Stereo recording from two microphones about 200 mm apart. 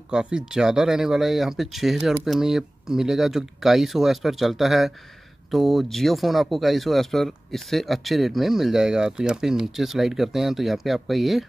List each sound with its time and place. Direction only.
0.1 s speech: 5° right (ahead or behind)